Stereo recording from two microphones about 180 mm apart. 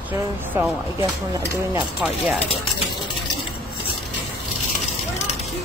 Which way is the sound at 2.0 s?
Centre (ahead or behind).